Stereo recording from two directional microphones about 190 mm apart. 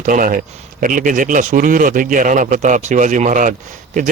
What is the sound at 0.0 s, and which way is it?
A man's voice, 45° right (ahead or behind).